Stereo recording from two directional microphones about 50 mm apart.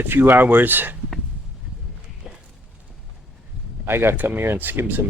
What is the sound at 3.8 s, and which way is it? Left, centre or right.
Speech, right.